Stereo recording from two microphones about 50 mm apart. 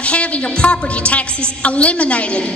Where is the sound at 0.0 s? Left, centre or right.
Left.